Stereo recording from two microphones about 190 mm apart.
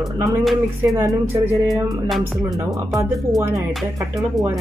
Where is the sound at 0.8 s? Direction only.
15° right (ahead or behind).